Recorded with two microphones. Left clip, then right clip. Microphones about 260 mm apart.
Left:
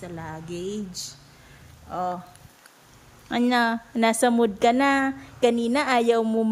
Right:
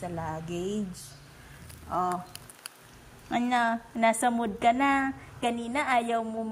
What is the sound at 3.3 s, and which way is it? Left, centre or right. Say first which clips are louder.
A woman's voice: left 4 dB; centre.